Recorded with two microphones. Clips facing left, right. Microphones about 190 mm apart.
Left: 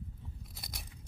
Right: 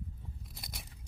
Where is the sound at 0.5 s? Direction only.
Centre (ahead or behind).